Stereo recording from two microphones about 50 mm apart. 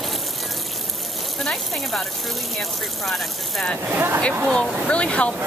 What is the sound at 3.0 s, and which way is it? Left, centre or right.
Speech, centre.